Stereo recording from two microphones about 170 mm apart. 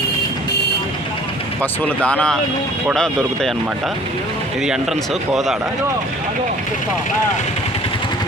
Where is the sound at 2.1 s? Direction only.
5° left (ahead or behind).